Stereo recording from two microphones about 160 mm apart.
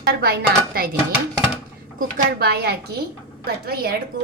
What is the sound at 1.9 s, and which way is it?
A woman's voice, 80° right.